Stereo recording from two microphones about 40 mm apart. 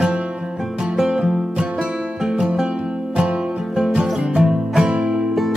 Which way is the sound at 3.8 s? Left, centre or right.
Centre.